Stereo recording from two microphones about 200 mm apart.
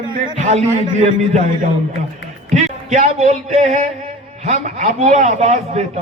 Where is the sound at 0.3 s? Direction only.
35° right (ahead or behind).